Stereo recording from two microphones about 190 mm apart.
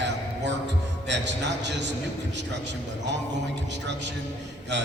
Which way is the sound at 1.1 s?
65° right (ahead or behind).